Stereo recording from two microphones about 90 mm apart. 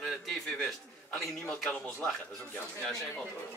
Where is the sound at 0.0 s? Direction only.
Centre (ahead or behind).